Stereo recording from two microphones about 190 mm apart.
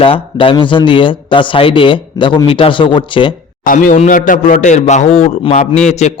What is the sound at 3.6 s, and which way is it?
A man's voice, 45° left (ahead or behind).